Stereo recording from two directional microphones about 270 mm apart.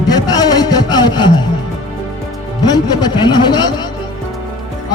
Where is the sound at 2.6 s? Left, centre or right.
Centre.